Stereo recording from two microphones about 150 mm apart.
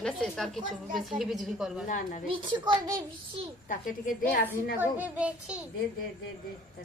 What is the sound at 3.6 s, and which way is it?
Speech, 65° left (ahead or behind).